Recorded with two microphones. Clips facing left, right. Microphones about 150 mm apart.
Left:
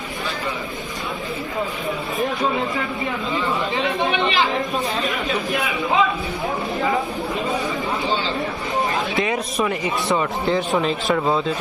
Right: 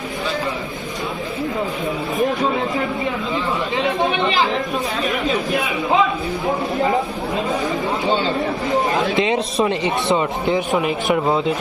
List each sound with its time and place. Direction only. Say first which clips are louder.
8.9 s a man's voice: right 4 dB; 25° right (ahead or behind)